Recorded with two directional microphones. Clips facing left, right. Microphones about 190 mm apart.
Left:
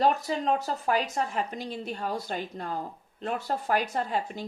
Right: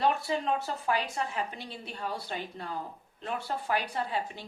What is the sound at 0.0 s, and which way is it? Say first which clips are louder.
A woman's voice: left 3 dB; 40° left (ahead or behind).